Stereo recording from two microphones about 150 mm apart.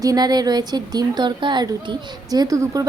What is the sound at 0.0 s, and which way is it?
Speech, 25° right (ahead or behind).